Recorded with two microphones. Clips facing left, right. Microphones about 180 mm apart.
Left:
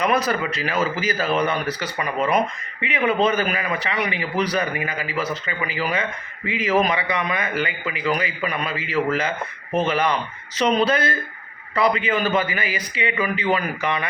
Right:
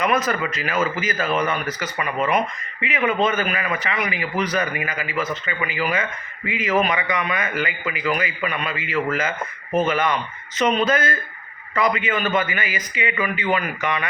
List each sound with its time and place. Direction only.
0.0 s a man's voice: 35° left (ahead or behind)
3.1 s a man's voice: 35° left (ahead or behind)